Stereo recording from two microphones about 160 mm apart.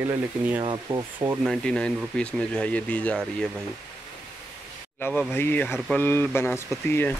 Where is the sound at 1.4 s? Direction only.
5° left (ahead or behind).